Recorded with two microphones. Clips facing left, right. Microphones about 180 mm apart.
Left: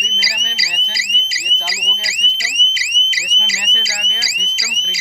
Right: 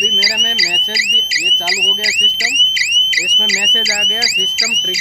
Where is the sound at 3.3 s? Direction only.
50° right (ahead or behind).